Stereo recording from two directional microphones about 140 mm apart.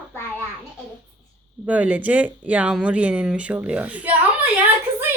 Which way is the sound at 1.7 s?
10° right (ahead or behind).